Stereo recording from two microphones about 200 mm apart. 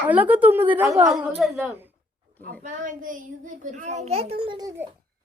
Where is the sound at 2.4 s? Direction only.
40° right (ahead or behind).